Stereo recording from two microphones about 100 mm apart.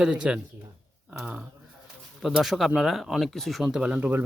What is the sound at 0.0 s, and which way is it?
Speech, 10° right (ahead or behind).